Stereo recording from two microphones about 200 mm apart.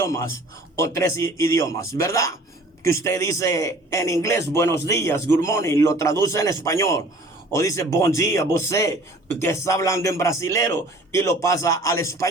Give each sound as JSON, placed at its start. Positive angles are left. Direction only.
{"t": 0.0, "sound": "a man's voice", "side_deg": 15}